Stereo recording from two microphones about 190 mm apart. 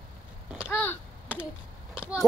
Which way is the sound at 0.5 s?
5° right (ahead or behind).